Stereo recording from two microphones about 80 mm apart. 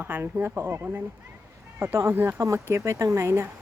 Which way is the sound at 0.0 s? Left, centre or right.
Right.